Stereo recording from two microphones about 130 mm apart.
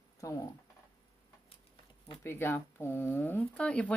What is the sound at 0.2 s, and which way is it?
Speech, 25° left (ahead or behind).